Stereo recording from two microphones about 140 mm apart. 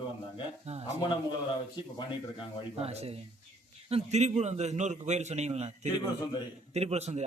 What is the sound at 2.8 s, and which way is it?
A man's voice, 45° right (ahead or behind).